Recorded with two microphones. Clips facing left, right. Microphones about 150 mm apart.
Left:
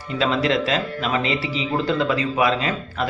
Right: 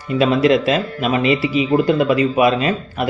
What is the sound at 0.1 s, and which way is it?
Speech, 15° right (ahead or behind).